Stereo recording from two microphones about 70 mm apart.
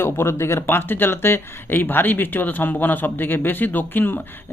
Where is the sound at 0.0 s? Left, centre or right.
Left.